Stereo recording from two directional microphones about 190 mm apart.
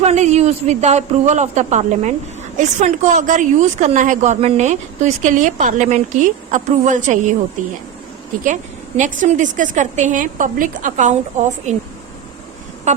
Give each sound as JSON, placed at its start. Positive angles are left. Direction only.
{"t": 0.0, "sound": "speech", "side_deg": -35}
{"t": 9.0, "sound": "speech", "side_deg": -40}
{"t": 12.9, "sound": "speech", "side_deg": -40}